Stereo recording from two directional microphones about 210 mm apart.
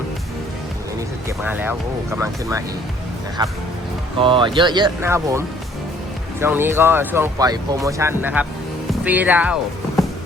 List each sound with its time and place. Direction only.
1.4 s speech: 10° right (ahead or behind)
4.2 s speech: 25° right (ahead or behind); by 9.6 s 5° right (ahead or behind)